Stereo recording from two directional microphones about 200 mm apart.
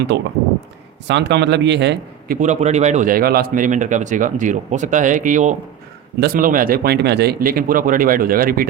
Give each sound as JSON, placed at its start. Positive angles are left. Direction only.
{"t": 0.1, "sound": "a man's voice", "side_deg": -60}
{"t": 6.1, "sound": "speech", "side_deg": -50}